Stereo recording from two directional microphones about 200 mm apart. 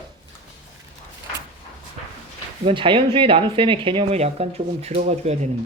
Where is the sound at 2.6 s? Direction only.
25° right (ahead or behind).